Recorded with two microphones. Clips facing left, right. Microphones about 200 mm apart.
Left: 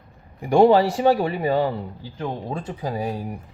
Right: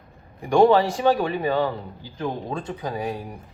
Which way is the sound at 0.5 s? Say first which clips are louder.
Left 1 dB; 30° left (ahead or behind).